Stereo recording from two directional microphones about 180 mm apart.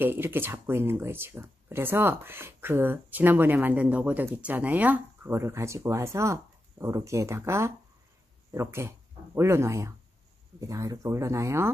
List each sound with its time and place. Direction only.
0.0 s speech: 10° right (ahead or behind)